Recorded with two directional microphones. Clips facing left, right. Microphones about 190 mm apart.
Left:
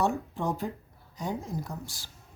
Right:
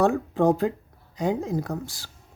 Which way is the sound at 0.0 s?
90° right.